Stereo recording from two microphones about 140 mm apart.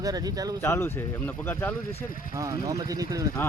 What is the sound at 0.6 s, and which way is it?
Speech, 20° left (ahead or behind).